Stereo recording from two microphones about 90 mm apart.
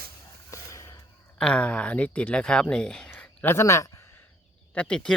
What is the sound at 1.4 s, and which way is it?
Speech, 10° left (ahead or behind).